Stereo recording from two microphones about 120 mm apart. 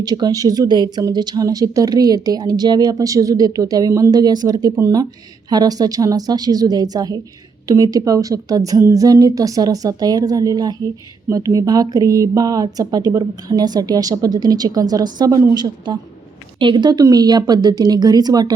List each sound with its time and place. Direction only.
0.0 s a woman's voice: 30° right (ahead or behind)